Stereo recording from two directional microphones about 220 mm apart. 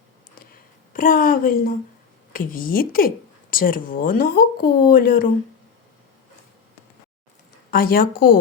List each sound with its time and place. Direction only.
0.3 s a sound: 40° left (ahead or behind)
2.3 s speech: 40° left (ahead or behind)
7.7 s speech: 40° left (ahead or behind)